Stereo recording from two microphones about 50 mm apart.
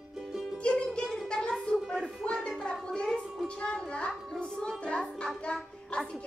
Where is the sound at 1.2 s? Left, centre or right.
Centre.